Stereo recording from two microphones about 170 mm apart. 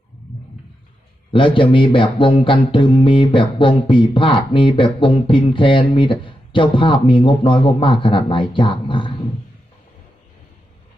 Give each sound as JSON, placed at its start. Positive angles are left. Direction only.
{"t": 1.3, "sound": "speech", "side_deg": 30}